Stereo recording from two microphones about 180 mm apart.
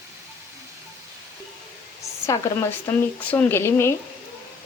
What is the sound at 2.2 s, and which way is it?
Dishes, 15° left (ahead or behind).